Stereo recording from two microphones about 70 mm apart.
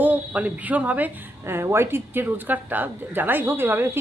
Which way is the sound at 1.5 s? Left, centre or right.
Right.